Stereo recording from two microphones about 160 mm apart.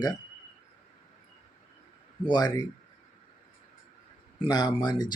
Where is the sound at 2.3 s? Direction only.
25° left (ahead or behind).